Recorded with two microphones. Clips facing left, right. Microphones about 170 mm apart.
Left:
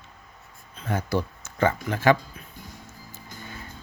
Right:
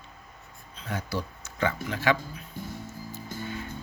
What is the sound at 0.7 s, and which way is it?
Speech, 50° left (ahead or behind).